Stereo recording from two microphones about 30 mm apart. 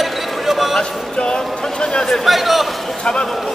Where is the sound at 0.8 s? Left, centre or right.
Left.